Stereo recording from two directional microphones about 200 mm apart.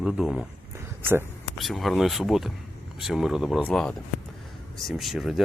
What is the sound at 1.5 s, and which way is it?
Speech, centre (ahead or behind).